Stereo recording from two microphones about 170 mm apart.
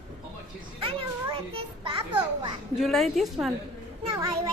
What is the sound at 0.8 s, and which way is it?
Children playing, 35° right (ahead or behind).